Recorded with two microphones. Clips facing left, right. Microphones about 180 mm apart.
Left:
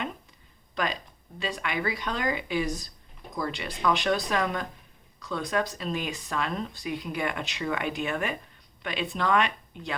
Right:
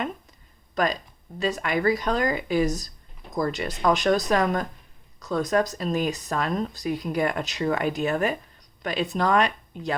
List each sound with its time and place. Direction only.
0.8 s a woman's voice: 45° right (ahead or behind)